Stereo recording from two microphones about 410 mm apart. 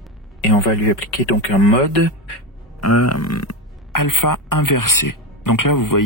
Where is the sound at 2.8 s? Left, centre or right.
Left.